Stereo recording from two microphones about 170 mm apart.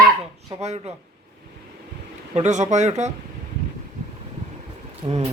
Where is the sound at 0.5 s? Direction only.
40° right (ahead or behind).